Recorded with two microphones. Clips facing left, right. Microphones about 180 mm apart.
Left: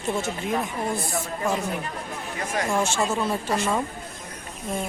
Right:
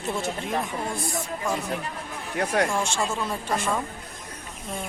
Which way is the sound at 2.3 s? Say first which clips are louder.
Right 5 dB; 65° right (ahead or behind).